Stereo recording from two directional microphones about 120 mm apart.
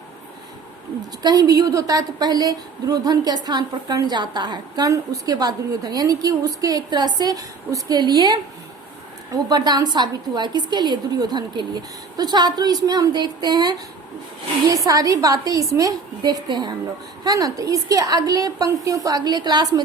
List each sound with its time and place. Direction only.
1.2 s a woman's voice: 35° right (ahead or behind)